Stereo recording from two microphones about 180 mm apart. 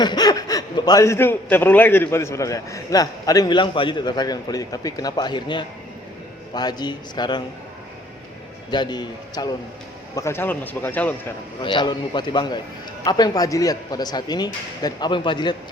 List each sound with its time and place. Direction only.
0.0 s speech: 20° left (ahead or behind)
8.7 s speech: 25° left (ahead or behind)
11.6 s speech: 25° left (ahead or behind)